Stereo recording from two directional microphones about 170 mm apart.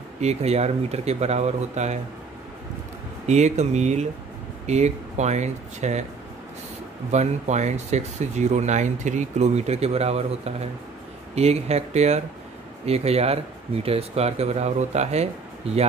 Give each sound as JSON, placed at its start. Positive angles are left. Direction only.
{"t": 0.2, "sound": "speech", "side_deg": -40}
{"t": 3.3, "sound": "speech", "side_deg": -40}
{"t": 7.1, "sound": "speech", "side_deg": -45}